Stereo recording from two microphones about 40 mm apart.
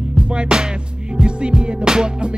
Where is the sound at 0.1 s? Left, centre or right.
Right.